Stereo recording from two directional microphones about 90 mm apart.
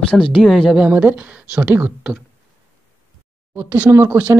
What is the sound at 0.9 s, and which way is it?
Speech, 20° right (ahead or behind).